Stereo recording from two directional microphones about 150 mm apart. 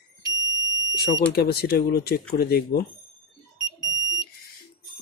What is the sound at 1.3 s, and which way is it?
Speech, 90° left.